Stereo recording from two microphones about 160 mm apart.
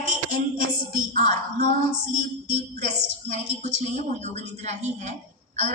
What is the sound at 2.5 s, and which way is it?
A woman's voice, 45° right (ahead or behind).